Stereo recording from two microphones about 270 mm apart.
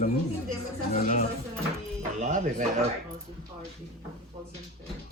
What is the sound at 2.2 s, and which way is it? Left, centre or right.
Speech, right.